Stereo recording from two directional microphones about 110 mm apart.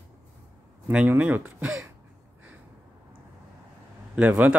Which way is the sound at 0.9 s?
10° right (ahead or behind).